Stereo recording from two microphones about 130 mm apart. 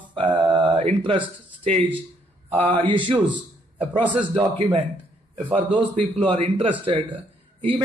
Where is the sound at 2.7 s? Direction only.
40° right (ahead or behind).